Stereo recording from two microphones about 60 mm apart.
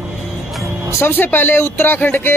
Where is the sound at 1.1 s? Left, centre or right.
Left.